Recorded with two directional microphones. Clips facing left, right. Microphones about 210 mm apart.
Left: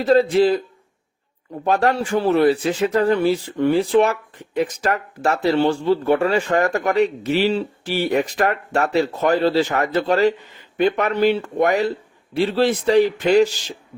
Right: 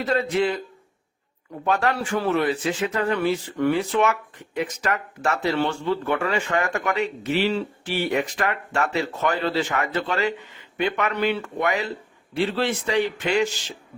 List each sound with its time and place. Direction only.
0.0 s speech: 35° left (ahead or behind)
1.6 s speech: 35° left (ahead or behind)